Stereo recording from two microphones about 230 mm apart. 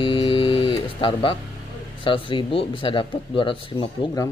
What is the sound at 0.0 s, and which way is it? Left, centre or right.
Music, left.